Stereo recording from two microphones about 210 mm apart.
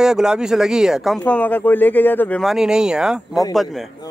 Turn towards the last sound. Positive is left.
turn(degrees=0)  # may be behind; listen again after turning